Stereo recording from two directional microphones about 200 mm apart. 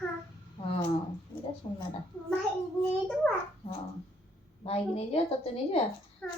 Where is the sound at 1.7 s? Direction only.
25° left (ahead or behind).